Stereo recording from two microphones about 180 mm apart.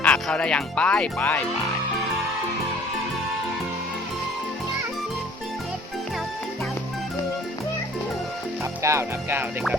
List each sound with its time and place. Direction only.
0.0 s speech: 5° left (ahead or behind)
8.8 s speech: 15° right (ahead or behind)